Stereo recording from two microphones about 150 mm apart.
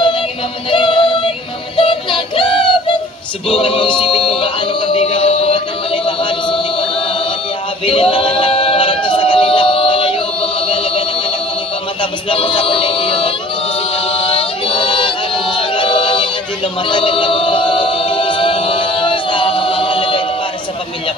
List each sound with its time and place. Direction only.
0.7 s synthetic singing: 35° left (ahead or behind)
1.8 s music: 35° left (ahead or behind)
3.4 s a sound: 35° left (ahead or behind)
4.4 s music: 35° left (ahead or behind)
7.8 s singing: 35° left (ahead or behind)
12.0 s music: 35° left (ahead or behind)
13.7 s chant: 35° left (ahead or behind)